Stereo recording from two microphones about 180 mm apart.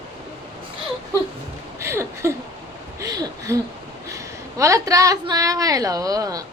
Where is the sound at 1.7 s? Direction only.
15° right (ahead or behind).